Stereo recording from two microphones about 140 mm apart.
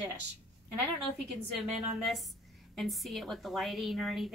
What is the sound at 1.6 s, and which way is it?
A woman's voice, centre (ahead or behind).